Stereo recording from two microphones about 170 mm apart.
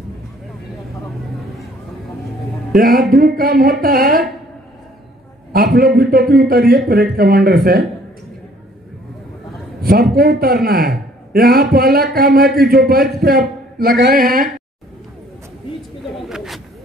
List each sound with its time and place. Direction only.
2.7 s a man's voice: 60° right (ahead or behind)
5.5 s a man's voice: 60° right (ahead or behind)
10.1 s a man's voice: 65° right (ahead or behind)
16.3 s a sound: centre (ahead or behind)